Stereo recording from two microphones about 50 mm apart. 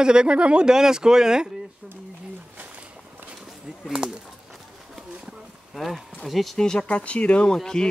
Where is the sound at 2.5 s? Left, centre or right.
Right.